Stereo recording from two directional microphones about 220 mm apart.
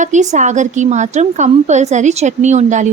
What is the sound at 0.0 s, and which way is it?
A woman's voice, 35° right (ahead or behind).